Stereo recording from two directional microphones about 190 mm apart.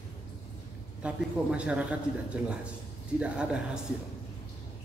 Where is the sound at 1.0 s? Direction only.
5° right (ahead or behind).